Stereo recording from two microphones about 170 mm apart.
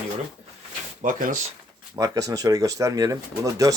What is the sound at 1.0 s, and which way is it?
Speech, 50° right (ahead or behind).